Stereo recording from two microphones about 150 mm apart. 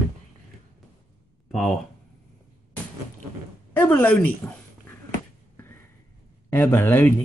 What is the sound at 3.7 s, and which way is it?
Speech, 10° left (ahead or behind).